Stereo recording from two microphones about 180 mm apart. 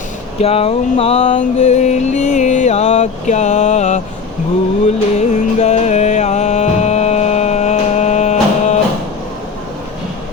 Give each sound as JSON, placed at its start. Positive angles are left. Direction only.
{"t": 0.3, "sound": "music", "side_deg": 35}